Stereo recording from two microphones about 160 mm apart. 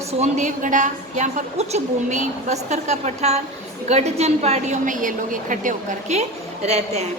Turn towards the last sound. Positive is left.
turn(degrees=-45)  # may be behind; listen again after turning